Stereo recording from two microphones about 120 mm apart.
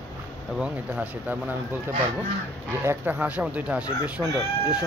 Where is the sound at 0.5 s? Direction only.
10° right (ahead or behind).